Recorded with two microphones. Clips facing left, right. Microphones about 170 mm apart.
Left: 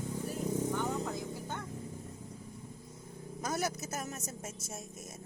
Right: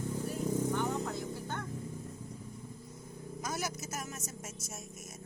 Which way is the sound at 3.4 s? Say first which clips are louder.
Left 3 dB; 35° left (ahead or behind).